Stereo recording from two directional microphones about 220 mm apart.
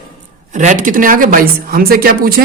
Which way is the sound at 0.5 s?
35° right (ahead or behind).